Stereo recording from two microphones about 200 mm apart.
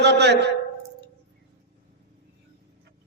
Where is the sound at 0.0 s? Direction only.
55° right (ahead or behind).